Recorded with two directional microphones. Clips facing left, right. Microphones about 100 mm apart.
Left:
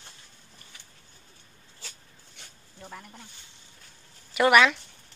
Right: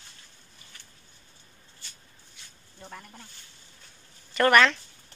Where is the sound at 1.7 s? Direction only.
90° left.